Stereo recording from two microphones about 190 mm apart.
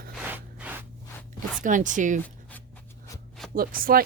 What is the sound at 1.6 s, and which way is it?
Speech, 40° right (ahead or behind).